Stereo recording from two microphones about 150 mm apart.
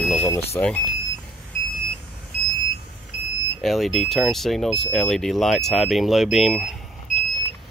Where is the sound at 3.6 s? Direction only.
Centre (ahead or behind).